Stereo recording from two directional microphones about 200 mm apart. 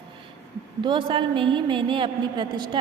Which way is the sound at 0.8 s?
25° right (ahead or behind).